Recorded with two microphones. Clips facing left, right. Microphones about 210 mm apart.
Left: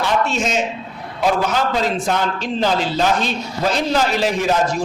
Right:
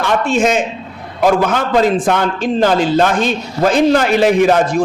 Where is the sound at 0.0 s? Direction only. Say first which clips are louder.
Right 5 dB; 50° right (ahead or behind).